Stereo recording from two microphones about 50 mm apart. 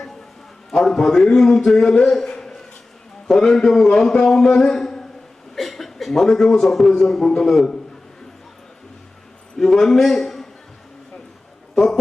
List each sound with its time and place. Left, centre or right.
0.7 s a man's voice: centre
2.0 s a sound: centre
3.2 s a man's voice: centre
9.6 s a man's voice: centre
11.7 s speech: centre